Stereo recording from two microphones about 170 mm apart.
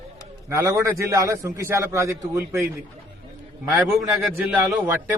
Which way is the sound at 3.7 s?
15° right (ahead or behind).